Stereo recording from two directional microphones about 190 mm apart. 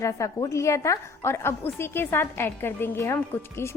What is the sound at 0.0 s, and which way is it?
A woman's voice, 15° left (ahead or behind).